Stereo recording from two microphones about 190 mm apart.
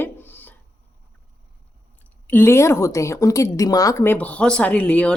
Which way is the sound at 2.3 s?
10° left (ahead or behind).